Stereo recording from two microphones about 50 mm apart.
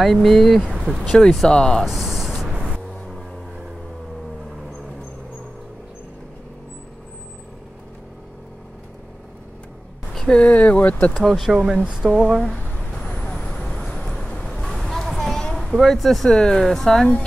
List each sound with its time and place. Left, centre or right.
0.0 s speech: centre
0.9 s speech: left
1.5 s speech: centre
1.9 s a sound: centre
10.3 s speech: left
11.1 s speech: centre; by 12.4 s right
13.0 s vehicle: centre
15.0 s a sound: centre
15.6 s speech: centre